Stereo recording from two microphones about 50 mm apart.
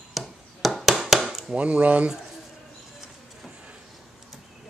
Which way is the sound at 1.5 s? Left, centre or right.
Right.